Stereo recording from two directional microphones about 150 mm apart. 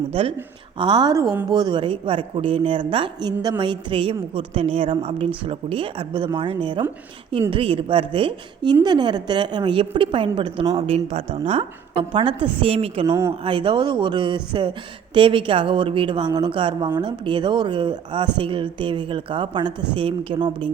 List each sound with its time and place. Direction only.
0.1 s a woman's voice: 40° right (ahead or behind)